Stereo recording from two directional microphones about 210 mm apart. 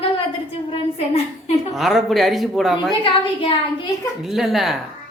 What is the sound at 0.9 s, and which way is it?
Speech, 30° left (ahead or behind).